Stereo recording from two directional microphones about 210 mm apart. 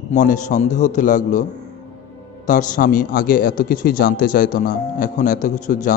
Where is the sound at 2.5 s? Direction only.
40° left (ahead or behind).